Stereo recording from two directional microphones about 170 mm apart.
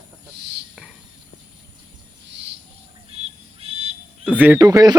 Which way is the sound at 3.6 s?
35° right (ahead or behind).